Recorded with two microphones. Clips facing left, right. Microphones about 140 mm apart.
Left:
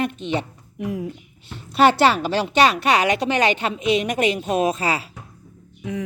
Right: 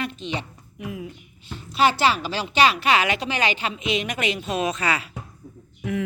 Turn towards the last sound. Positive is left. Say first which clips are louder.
# right 1 dB
turn(degrees=15)  # may be behind; listen again after turning